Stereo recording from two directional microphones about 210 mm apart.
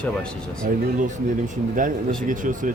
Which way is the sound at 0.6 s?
40° right (ahead or behind).